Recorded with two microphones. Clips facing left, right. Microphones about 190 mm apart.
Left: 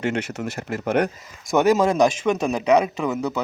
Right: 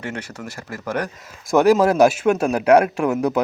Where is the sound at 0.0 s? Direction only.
25° left (ahead or behind).